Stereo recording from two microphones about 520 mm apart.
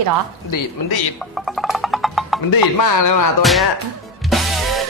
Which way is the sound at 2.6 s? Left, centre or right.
Left.